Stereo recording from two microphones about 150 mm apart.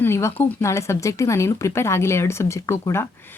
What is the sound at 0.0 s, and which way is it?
Speech, 15° left (ahead or behind).